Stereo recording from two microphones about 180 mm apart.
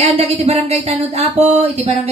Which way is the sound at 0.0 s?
35° right (ahead or behind).